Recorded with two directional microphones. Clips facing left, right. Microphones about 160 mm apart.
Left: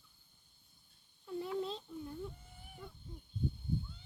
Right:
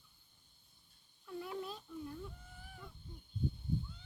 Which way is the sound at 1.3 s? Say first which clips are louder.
Left 5 dB; 25° left (ahead or behind).